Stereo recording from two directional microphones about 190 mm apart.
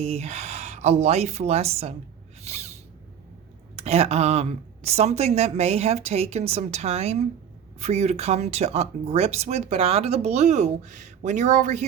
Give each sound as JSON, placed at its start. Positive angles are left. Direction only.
{"t": 0.0, "sound": "speech", "side_deg": -35}
{"t": 2.4, "sound": "a sound", "side_deg": -35}
{"t": 3.8, "sound": "speech", "side_deg": -30}